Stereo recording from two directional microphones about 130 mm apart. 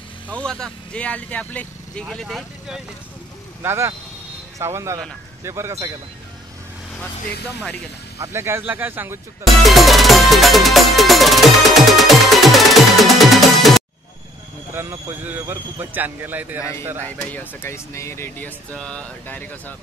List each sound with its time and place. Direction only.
0.3 s speech: 5° left (ahead or behind)
2.0 s speech: centre (ahead or behind)
3.6 s speech: 20° right (ahead or behind)
8.2 s speech: 20° right (ahead or behind)
9.4 s music: centre (ahead or behind)
14.7 s a man's voice: 20° right (ahead or behind)
17.0 s speech: 10° left (ahead or behind)
18.8 s speech: 10° left (ahead or behind)